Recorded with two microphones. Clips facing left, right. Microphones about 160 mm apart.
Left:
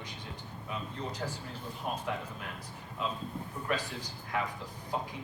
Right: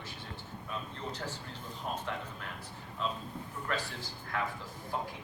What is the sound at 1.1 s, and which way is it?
Speech, 10° left (ahead or behind).